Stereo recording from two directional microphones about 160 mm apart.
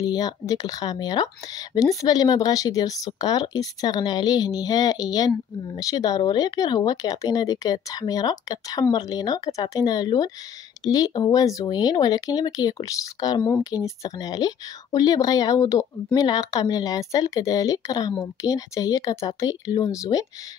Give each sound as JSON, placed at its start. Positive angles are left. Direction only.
{"t": 0.0, "sound": "speech", "side_deg": 25}